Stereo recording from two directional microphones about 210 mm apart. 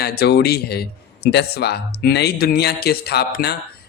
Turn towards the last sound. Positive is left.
turn(degrees=50)  # may be behind; listen again after turning